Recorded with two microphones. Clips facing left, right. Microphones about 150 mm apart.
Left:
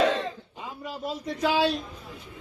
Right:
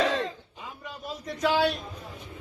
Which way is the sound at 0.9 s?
30° left (ahead or behind).